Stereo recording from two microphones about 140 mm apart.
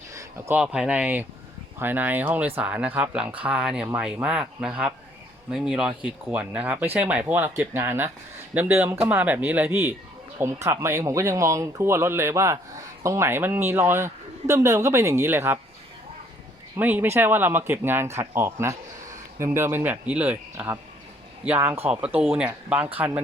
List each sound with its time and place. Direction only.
0.1 s a sound: 25° right (ahead or behind)
0.5 s a man's voice: 5° right (ahead or behind)
16.7 s a man's voice: 15° right (ahead or behind)